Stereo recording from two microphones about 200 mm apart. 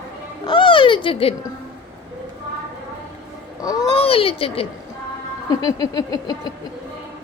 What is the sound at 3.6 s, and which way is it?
Speech, 20° left (ahead or behind).